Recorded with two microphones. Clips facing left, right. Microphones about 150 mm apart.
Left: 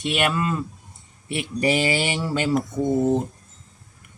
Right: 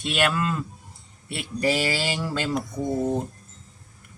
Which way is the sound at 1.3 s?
20° left (ahead or behind).